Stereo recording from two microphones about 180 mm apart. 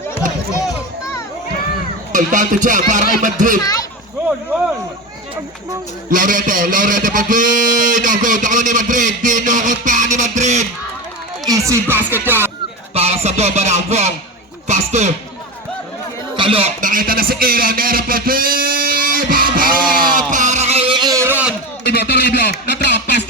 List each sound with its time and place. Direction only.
2.1 s a man's voice: 45° right (ahead or behind)
3.6 s speech: 20° left (ahead or behind)
6.1 s a man's voice: 50° right (ahead or behind)
11.4 s speech: 15° right (ahead or behind)
12.9 s a sound: 35° right (ahead or behind)
14.7 s speech: 40° right (ahead or behind)
16.3 s speech: 30° right (ahead or behind)
16.8 s speech: 50° right (ahead or behind)
20.3 s a sound: 40° right (ahead or behind); by 21.5 s 10° right (ahead or behind)
21.8 s speech: 65° left (ahead or behind)